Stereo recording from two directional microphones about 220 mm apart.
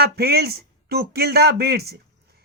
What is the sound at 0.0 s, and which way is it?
Speech, 45° right (ahead or behind).